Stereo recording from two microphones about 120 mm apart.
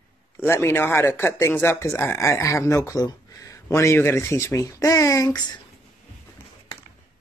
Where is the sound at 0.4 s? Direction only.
20° left (ahead or behind).